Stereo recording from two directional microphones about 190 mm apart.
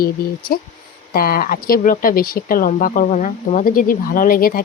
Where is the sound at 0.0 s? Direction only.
50° left (ahead or behind).